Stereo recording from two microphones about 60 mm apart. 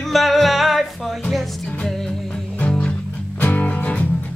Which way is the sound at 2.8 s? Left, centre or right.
Left.